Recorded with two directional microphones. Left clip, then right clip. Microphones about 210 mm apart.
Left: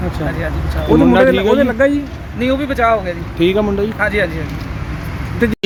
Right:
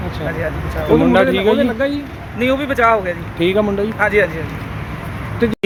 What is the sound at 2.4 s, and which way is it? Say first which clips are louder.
Speech: right 1 dB; centre (ahead or behind).